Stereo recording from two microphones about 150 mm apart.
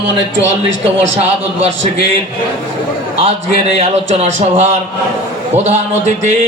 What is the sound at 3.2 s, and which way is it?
A man's voice, 45° right (ahead or behind).